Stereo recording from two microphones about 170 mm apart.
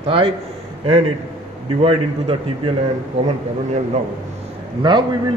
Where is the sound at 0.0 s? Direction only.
35° right (ahead or behind).